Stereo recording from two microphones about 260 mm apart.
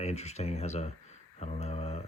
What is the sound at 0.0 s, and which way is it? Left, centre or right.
Speech, left.